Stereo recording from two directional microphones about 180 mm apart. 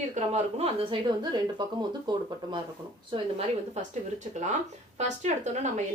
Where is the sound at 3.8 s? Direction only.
40° right (ahead or behind).